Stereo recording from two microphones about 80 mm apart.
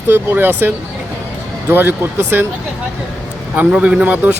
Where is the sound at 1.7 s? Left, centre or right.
Right.